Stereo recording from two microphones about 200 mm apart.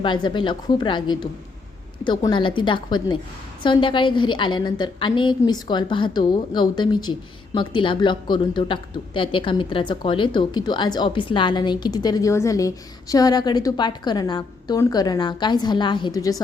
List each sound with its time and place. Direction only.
0.0 s a woman's voice: 25° left (ahead or behind)